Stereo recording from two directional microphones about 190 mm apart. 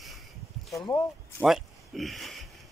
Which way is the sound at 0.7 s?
15° left (ahead or behind).